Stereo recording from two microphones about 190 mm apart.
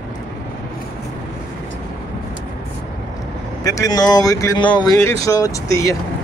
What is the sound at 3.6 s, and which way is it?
Speech, 20° left (ahead or behind).